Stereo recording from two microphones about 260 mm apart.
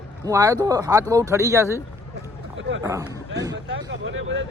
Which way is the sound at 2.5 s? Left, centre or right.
Right.